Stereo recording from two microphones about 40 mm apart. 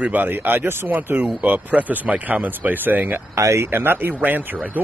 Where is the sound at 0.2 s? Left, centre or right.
Right.